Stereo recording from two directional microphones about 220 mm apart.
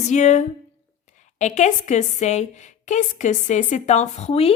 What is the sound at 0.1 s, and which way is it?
A woman's voice, 30° left (ahead or behind).